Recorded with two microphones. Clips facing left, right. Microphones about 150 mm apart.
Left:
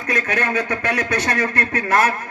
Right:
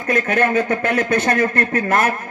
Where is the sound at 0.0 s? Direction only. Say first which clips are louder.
Right 5 dB; 50° right (ahead or behind).